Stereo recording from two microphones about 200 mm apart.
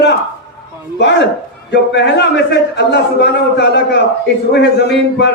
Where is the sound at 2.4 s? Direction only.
55° left (ahead or behind).